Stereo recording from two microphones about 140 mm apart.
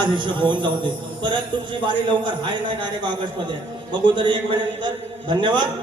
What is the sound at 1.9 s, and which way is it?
A man's voice, 35° right (ahead or behind).